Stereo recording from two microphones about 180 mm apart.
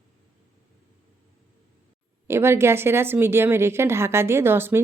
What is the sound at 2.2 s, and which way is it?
A woman's voice, 15° right (ahead or behind).